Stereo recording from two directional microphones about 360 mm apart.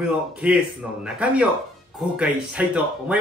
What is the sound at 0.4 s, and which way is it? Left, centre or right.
Speech, centre.